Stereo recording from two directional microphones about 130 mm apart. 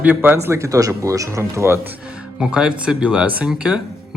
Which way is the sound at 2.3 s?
5° right (ahead or behind).